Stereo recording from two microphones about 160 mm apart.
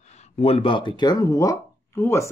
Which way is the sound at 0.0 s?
45° left (ahead or behind).